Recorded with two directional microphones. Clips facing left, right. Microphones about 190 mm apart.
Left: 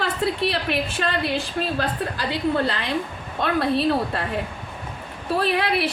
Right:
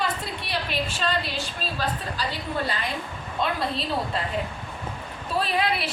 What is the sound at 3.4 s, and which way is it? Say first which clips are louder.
Speech: left 7 dB; 60° left (ahead or behind).